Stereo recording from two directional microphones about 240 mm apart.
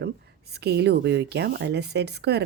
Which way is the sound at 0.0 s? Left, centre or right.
Right.